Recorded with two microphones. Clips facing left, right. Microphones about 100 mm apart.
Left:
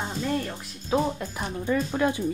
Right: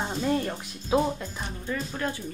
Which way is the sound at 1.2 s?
10° left (ahead or behind).